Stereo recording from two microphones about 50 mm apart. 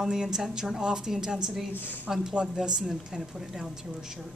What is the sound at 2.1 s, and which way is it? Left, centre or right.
A woman's voice, centre.